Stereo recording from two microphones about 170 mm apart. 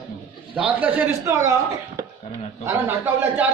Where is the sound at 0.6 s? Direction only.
10° right (ahead or behind).